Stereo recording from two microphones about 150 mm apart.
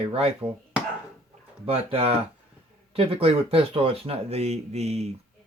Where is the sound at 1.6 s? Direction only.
40° right (ahead or behind).